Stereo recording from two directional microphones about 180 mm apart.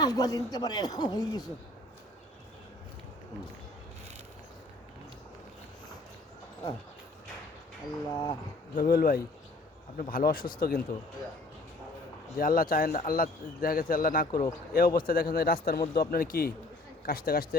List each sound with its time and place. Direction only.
0.0 s speech: 20° left (ahead or behind)
8.1 s speech: 20° left (ahead or behind)
8.7 s a man's voice: 60° left (ahead or behind)
12.4 s a man's voice: 50° left (ahead or behind)